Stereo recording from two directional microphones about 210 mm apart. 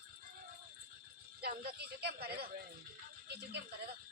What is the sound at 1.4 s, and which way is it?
Speech, 45° right (ahead or behind).